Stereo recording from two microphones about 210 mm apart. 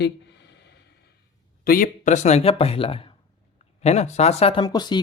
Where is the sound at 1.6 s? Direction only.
40° left (ahead or behind); by 4.9 s 20° left (ahead or behind).